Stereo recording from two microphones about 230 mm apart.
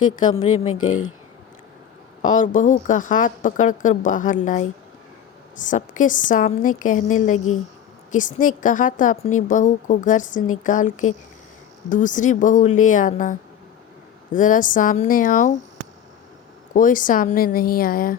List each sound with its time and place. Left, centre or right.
0.7 s speech: left
2.2 s a woman's voice: left
14.3 s a woman's voice: left
16.7 s a woman's voice: left